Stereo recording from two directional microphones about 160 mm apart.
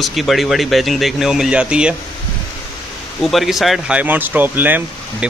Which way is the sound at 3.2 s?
Centre (ahead or behind).